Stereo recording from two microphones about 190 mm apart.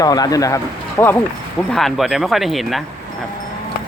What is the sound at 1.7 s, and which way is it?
Speech, centre (ahead or behind).